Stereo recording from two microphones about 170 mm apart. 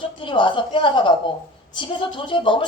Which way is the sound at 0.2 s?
30° left (ahead or behind).